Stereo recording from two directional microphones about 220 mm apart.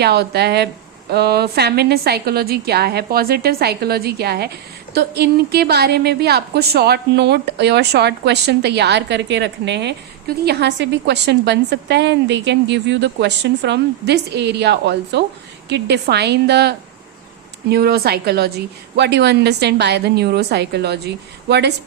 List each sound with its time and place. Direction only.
0.0 s a woman's voice: 45° right (ahead or behind)